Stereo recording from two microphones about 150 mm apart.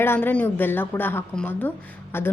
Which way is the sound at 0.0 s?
15° left (ahead or behind).